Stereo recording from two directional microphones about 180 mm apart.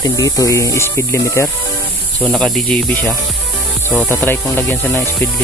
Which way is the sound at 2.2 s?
5° left (ahead or behind).